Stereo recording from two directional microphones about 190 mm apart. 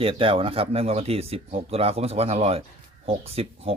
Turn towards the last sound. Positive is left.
turn(degrees=-30)  # may be behind; listen again after turning